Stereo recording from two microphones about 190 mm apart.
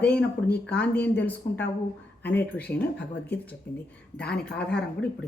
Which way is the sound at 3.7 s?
60° left (ahead or behind).